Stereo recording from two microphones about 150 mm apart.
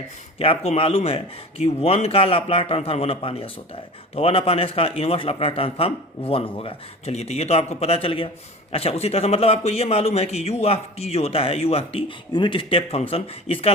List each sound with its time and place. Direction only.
0.3 s a man's voice: 40° left (ahead or behind)